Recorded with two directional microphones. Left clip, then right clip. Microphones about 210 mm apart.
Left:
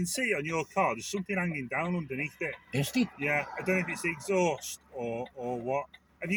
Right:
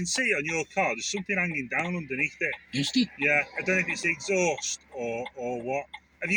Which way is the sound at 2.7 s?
45° left (ahead or behind).